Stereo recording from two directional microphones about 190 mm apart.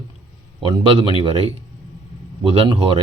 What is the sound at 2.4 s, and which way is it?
Speech, 30° right (ahead or behind).